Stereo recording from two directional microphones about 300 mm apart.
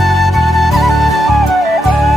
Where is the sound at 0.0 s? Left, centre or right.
Centre.